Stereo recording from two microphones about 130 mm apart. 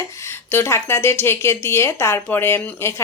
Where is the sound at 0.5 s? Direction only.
20° left (ahead or behind).